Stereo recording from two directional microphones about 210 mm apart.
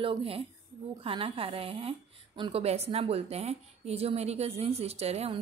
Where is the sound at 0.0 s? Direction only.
25° right (ahead or behind).